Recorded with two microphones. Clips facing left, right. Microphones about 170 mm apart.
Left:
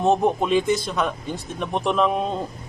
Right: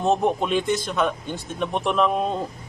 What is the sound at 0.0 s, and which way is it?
Speech, centre (ahead or behind).